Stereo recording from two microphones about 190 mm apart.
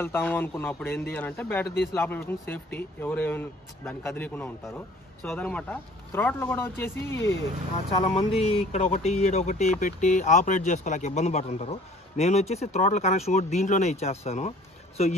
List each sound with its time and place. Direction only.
0.0 s speech: 10° left (ahead or behind)
8.0 s speech: 30° left (ahead or behind)